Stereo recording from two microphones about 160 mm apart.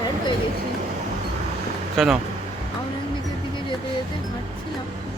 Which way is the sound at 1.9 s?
Centre (ahead or behind).